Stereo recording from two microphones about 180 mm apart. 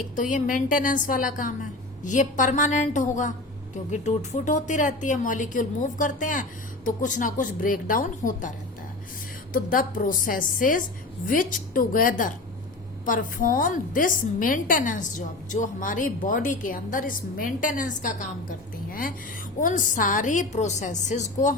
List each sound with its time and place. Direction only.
0.2 s a woman's voice: 45° left (ahead or behind)